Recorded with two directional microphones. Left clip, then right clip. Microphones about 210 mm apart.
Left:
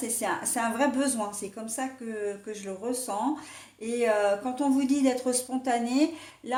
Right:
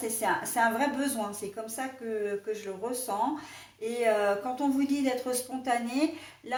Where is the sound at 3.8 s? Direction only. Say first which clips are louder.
Left 1 dB; 40° left (ahead or behind).